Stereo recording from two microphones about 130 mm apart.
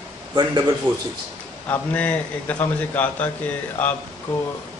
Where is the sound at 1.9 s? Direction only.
10° left (ahead or behind).